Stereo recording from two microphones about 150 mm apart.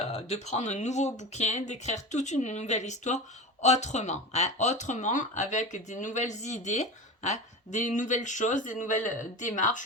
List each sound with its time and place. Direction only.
0.0 s speech: 45° left (ahead or behind)